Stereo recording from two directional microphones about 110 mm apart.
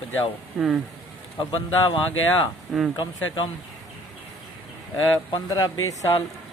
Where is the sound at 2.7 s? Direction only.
Centre (ahead or behind).